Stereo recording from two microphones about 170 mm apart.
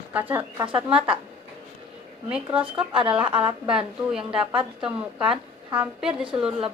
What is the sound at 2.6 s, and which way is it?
Speech, 30° right (ahead or behind).